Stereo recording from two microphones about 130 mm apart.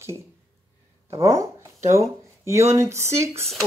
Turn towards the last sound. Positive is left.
turn(degrees=-20)  # may be behind; listen again after turning